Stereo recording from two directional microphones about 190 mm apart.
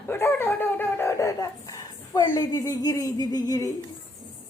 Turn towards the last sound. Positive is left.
turn(degrees=20)  # may be behind; listen again after turning